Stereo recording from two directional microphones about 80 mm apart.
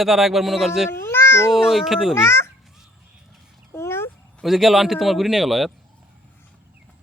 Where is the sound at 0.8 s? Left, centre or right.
Left.